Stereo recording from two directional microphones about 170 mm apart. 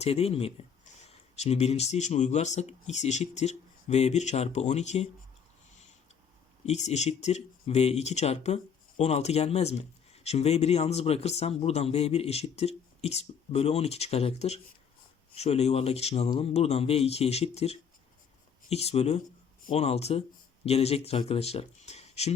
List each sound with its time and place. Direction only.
0.0 s speech: 35° left (ahead or behind)
6.7 s speech: 40° left (ahead or behind)